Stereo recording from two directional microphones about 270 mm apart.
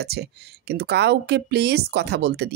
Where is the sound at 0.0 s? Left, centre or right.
Right.